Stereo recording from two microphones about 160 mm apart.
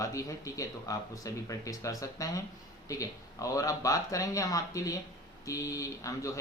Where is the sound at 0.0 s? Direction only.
20° left (ahead or behind).